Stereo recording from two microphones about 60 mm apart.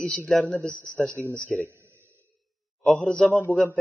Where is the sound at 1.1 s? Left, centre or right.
Right.